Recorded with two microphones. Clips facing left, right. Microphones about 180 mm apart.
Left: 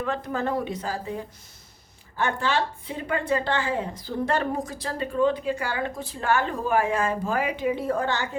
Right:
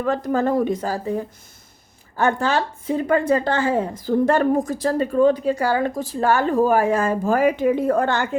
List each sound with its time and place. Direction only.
0.0 s a woman's voice: 40° right (ahead or behind)